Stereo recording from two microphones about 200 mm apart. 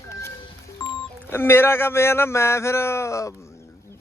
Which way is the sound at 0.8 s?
15° left (ahead or behind).